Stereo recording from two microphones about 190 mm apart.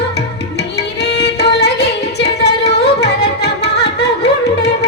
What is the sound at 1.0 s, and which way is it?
Singing, 60° left (ahead or behind).